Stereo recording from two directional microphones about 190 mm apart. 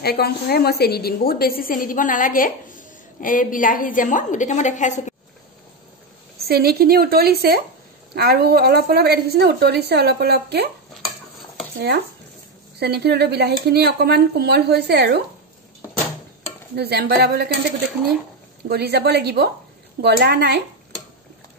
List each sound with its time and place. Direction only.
0.0 s a woman's voice: 55° left (ahead or behind); by 5.1 s 40° left (ahead or behind)
6.3 s a woman's voice: 55° right (ahead or behind)
12.7 s a woman's voice: 60° right (ahead or behind)
16.7 s a woman's voice: 55° right (ahead or behind)
18.7 s a woman's voice: 55° right (ahead or behind)